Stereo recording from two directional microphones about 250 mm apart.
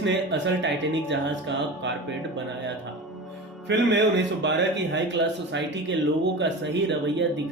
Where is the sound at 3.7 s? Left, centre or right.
Right.